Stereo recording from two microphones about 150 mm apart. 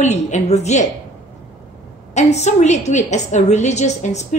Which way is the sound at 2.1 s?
50° left (ahead or behind).